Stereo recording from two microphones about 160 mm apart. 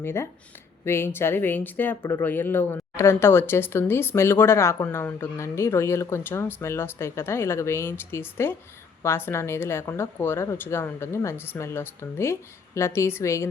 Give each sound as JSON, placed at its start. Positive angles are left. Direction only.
{"t": 0.0, "sound": "speech", "side_deg": 15}